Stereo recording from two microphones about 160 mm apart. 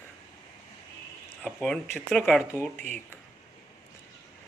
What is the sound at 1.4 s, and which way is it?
Speech, centre (ahead or behind).